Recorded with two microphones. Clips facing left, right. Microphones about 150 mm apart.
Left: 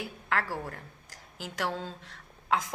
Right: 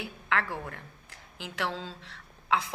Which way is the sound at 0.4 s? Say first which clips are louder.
Left 1 dB; 5° left (ahead or behind).